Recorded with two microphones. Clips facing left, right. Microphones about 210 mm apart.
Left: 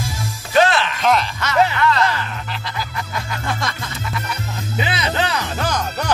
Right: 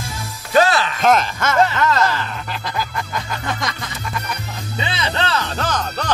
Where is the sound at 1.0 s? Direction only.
45° right (ahead or behind).